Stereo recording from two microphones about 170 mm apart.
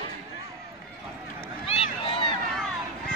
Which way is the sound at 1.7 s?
30° left (ahead or behind).